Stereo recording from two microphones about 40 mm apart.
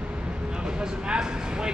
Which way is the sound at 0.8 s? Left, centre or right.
Centre.